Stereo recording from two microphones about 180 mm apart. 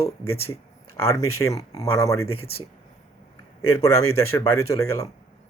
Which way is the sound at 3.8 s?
15° left (ahead or behind).